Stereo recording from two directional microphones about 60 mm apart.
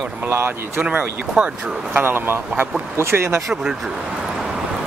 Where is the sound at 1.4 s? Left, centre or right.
Centre.